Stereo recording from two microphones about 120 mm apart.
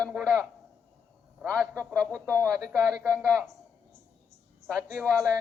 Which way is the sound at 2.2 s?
20° right (ahead or behind).